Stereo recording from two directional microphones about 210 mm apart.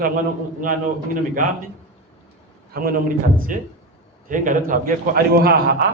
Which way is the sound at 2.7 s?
45° right (ahead or behind).